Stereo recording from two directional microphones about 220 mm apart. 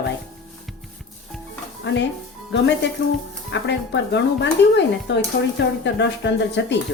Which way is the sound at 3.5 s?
55° left (ahead or behind).